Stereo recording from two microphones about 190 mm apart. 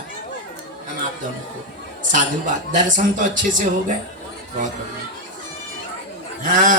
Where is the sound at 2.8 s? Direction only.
40° right (ahead or behind).